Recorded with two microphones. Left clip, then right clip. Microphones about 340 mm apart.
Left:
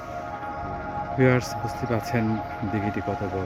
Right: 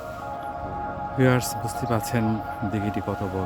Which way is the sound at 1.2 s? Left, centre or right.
Centre.